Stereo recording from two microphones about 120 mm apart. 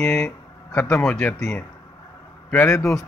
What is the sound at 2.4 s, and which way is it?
Speech, 10° left (ahead or behind).